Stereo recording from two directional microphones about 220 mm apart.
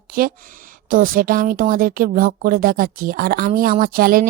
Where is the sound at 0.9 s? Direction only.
40° right (ahead or behind).